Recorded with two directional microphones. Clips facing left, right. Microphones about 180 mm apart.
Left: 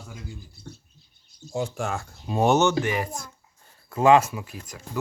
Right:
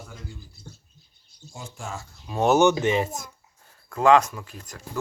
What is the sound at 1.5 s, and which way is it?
Speech, 70° left (ahead or behind).